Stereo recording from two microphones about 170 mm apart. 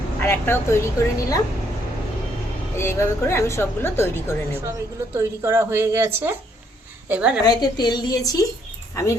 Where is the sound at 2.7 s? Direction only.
15° left (ahead or behind).